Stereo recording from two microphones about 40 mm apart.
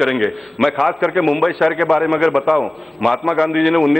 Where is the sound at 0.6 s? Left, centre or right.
Centre.